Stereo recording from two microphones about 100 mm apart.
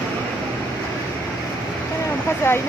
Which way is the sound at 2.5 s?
25° left (ahead or behind).